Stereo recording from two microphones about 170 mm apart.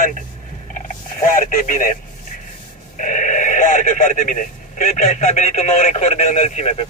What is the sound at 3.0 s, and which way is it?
Speech, 50° left (ahead or behind).